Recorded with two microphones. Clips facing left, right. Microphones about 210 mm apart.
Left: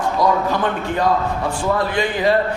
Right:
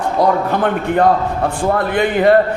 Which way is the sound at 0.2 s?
60° right (ahead or behind).